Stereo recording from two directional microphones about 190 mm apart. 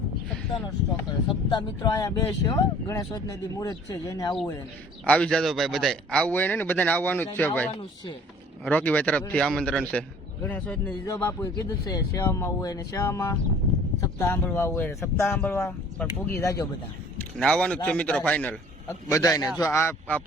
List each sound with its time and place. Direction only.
1.3 s speech: 25° left (ahead or behind)
5.0 s speech: 5° left (ahead or behind)
7.7 s speech: 30° left (ahead or behind)
8.6 s speech: 5° left (ahead or behind)
17.2 s speech: 5° left (ahead or behind)